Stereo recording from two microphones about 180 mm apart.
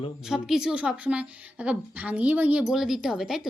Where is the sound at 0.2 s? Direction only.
Centre (ahead or behind).